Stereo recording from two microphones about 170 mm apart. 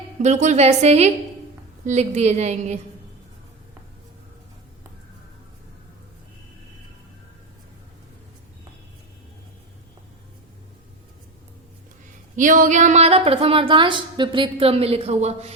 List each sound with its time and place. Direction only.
0.2 s a woman's voice: 45° right (ahead or behind)
12.4 s a woman's voice: 50° right (ahead or behind)